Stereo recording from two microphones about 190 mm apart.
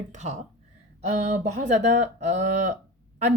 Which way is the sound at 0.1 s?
35° right (ahead or behind).